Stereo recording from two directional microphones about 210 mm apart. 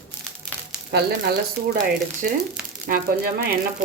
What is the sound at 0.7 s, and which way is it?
Speech, 50° right (ahead or behind).